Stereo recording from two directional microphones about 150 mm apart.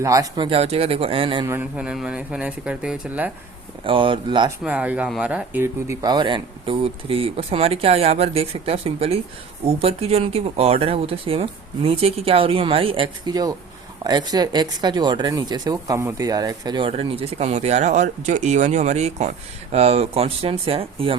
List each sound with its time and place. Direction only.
0.0 s speech: 20° right (ahead or behind)
1.5 s speech: 10° right (ahead or behind)
3.8 s speech: 35° right (ahead or behind)
4.6 s speech: 10° right (ahead or behind); by 21.2 s 40° right (ahead or behind)